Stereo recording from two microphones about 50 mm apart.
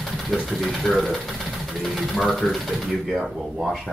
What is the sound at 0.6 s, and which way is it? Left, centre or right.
Speech, centre.